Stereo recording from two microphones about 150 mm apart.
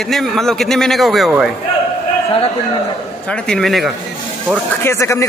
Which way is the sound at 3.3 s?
5° left (ahead or behind).